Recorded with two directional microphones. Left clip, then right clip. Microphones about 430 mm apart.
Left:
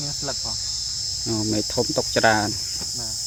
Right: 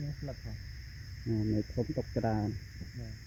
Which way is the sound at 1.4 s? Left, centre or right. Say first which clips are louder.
Left 10 dB; centre.